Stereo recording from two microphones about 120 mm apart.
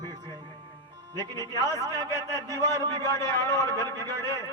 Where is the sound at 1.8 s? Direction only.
35° right (ahead or behind).